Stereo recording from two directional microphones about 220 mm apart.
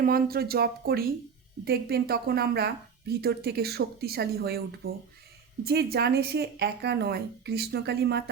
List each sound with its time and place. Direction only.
0.0 s speech: 40° right (ahead or behind)